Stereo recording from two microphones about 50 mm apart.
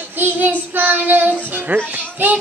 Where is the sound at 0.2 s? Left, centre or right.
Right.